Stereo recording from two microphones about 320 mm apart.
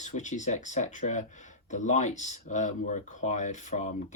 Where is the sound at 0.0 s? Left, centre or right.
Left.